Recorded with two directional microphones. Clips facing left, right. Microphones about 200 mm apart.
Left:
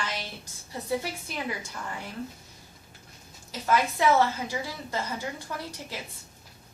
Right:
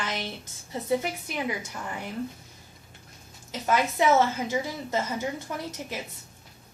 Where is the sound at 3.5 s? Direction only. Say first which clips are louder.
Even; 20° right (ahead or behind).